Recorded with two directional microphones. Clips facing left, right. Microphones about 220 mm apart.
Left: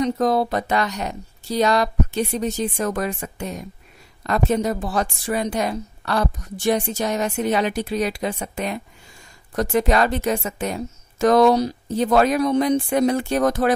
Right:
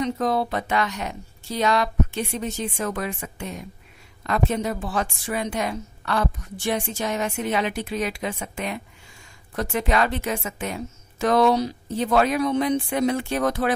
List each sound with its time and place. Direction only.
0.0 s a woman's voice: 40° left (ahead or behind)